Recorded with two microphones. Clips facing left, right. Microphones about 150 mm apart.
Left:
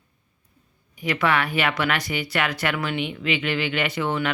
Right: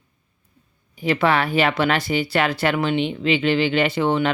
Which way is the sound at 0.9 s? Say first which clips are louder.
Right 4 dB; 30° right (ahead or behind).